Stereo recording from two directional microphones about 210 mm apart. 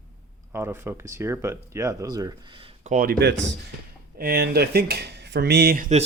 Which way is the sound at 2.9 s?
45° right (ahead or behind).